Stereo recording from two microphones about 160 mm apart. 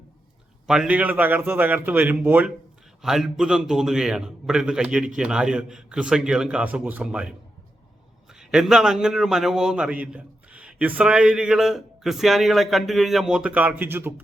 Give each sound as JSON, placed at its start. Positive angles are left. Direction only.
{"t": 0.7, "sound": "a man's voice", "side_deg": -5}